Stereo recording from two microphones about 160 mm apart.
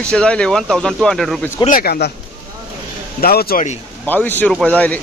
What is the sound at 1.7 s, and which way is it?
Speech, 70° left (ahead or behind).